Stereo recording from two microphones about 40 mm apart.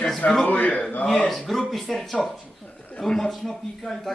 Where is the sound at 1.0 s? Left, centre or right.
Centre.